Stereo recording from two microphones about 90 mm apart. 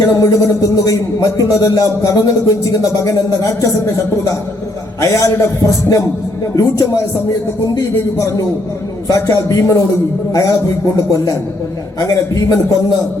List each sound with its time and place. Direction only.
0.1 s a man's voice: 40° left (ahead or behind)